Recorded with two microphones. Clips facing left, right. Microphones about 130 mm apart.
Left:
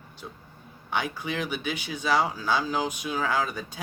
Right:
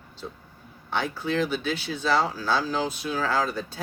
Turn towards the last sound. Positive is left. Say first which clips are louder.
# right 2 dB
turn(degrees=15)  # may be behind; listen again after turning